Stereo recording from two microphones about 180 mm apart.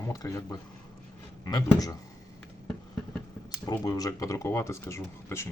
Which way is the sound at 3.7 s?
20° left (ahead or behind).